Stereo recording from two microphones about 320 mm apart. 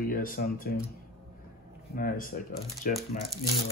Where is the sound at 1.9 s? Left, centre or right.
Left.